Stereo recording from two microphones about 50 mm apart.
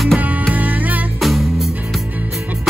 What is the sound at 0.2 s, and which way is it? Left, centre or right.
Music, right.